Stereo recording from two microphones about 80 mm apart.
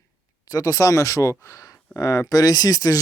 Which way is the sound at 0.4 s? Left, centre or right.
Left.